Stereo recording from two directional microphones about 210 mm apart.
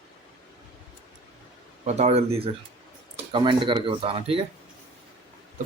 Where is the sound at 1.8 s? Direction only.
30° right (ahead or behind).